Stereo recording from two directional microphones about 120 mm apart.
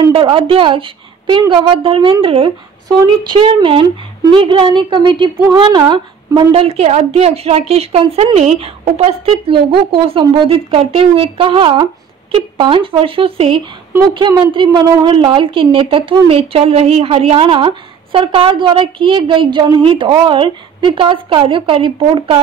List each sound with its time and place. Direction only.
0.1 s a woman's voice: 45° right (ahead or behind)
6.5 s a woman's voice: 55° right (ahead or behind)
8.4 s a woman's voice: 60° right (ahead or behind)
9.5 s a woman's voice: 45° right (ahead or behind)